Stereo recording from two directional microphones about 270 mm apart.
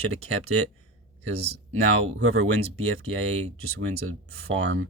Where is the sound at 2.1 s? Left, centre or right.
Right.